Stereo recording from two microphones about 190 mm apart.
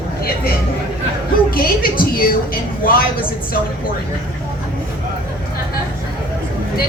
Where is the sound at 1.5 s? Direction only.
50° left (ahead or behind).